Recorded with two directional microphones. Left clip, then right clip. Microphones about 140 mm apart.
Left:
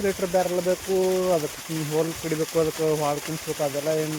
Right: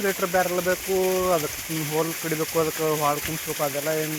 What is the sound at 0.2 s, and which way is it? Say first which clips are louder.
Speech: even; 25° left (ahead or behind).